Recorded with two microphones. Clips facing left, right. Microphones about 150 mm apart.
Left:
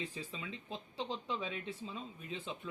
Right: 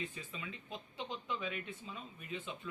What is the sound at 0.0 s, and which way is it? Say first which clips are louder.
Speech: left 2 dB; 30° left (ahead or behind).